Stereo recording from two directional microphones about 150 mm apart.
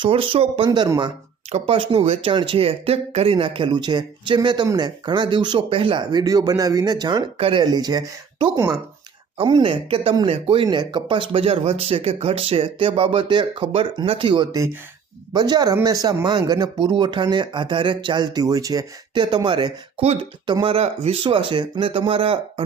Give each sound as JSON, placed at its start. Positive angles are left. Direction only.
{"t": 0.0, "sound": "speech", "side_deg": -35}
{"t": 1.5, "sound": "speech", "side_deg": -45}
{"t": 9.4, "sound": "speech", "side_deg": -35}
{"t": 21.2, "sound": "speech", "side_deg": -30}